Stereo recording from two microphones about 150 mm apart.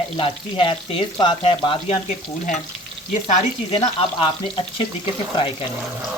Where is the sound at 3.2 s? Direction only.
40° left (ahead or behind).